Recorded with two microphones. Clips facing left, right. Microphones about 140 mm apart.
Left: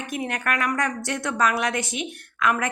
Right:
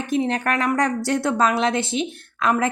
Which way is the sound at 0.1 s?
30° right (ahead or behind).